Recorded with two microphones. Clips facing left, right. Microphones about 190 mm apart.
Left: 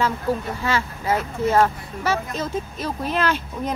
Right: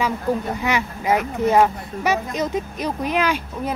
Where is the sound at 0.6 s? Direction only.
15° right (ahead or behind).